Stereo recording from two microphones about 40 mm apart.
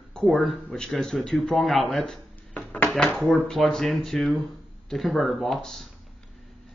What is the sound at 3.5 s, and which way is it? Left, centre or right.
A man's voice, centre.